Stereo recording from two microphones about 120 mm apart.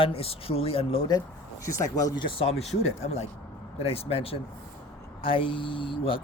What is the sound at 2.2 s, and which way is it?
Speech, 50° left (ahead or behind).